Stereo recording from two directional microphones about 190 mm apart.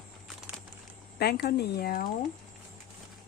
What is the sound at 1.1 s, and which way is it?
Speech, 55° left (ahead or behind).